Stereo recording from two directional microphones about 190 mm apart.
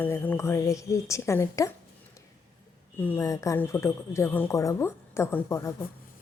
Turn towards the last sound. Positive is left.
turn(degrees=15)  # may be behind; listen again after turning